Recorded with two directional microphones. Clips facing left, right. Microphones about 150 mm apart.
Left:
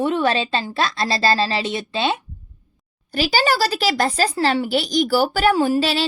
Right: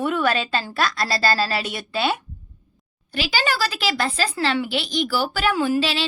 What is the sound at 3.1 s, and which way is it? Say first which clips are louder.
Speech: left 5 dB; 40° left (ahead or behind).